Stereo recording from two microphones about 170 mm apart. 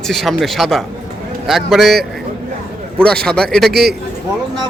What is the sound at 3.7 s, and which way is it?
Speech, 70° right (ahead or behind).